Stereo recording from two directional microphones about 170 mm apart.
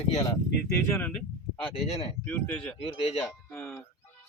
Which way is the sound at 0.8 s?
10° left (ahead or behind).